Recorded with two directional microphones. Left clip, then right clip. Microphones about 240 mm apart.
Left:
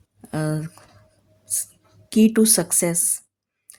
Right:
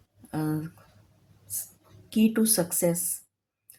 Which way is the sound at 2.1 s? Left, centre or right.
Left.